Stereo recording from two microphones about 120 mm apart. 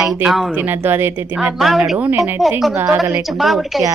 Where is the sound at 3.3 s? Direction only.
Centre (ahead or behind).